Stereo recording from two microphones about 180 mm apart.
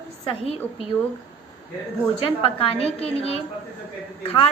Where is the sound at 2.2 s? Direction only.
30° left (ahead or behind).